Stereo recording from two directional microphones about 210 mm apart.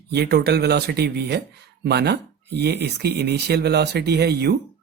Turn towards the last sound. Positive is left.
turn(degrees=-50)  # may be behind; listen again after turning